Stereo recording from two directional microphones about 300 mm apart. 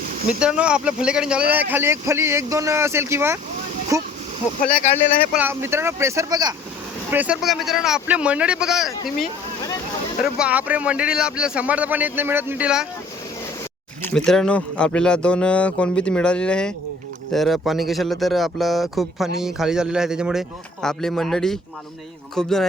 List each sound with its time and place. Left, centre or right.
0.3 s speech: centre
4.6 s speech: left
5.3 s speech: centre
10.3 s speech: centre
14.0 s speech: centre